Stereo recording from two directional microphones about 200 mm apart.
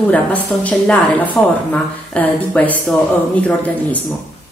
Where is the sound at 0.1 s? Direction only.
5° left (ahead or behind).